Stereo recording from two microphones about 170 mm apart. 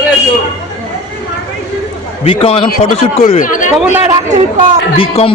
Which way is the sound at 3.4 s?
50° left (ahead or behind).